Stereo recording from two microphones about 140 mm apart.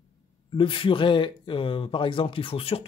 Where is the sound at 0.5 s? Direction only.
40° left (ahead or behind).